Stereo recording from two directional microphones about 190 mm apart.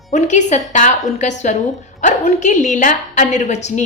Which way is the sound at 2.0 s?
40° left (ahead or behind).